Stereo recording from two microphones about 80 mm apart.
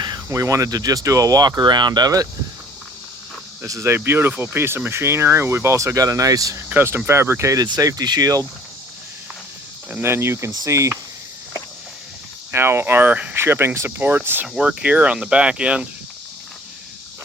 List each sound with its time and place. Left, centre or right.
0.3 s speech: right
3.7 s speech: right
6.7 s speech: right
7.6 s speech: right
10.0 s speech: right
12.5 s speech: right
13.3 s speech: right
14.4 s speech: centre